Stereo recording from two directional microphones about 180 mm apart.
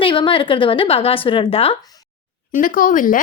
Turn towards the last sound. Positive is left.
turn(degrees=45)  # may be behind; listen again after turning